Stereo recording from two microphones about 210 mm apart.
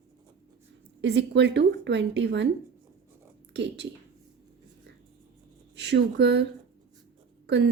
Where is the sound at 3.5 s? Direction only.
55° right (ahead or behind).